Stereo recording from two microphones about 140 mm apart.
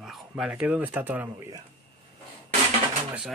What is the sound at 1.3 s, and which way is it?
Speech, 25° right (ahead or behind).